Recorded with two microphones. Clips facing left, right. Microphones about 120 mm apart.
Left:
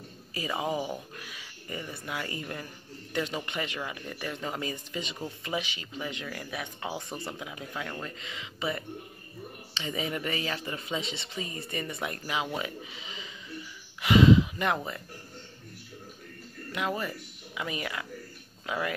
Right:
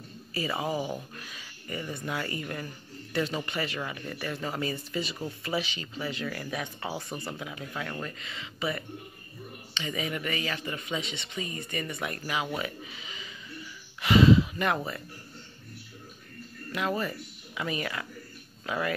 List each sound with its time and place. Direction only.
0.3 s a man's voice: 15° left (ahead or behind)
7.0 s speech: centre (ahead or behind)
7.3 s a man's voice: 15° left (ahead or behind)
16.7 s a man's voice: 15° left (ahead or behind)